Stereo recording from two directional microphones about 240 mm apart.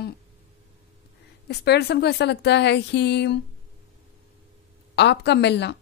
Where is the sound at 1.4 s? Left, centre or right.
Left.